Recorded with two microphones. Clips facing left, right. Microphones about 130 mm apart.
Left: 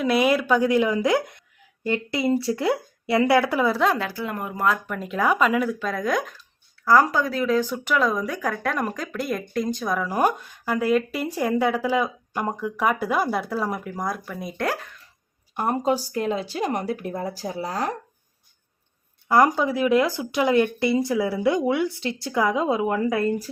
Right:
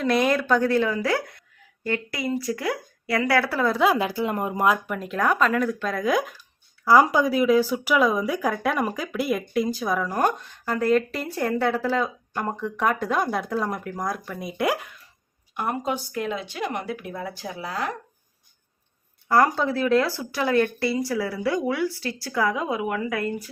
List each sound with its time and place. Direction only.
0.0 s speech: 5° left (ahead or behind)
3.7 s speech: 5° right (ahead or behind)
3.9 s speech: 20° right (ahead or behind)
4.9 s speech: centre (ahead or behind)
10.1 s speech: 10° left (ahead or behind)
14.7 s speech: 10° right (ahead or behind)
15.5 s speech: 35° left (ahead or behind)
19.3 s speech: 15° left (ahead or behind)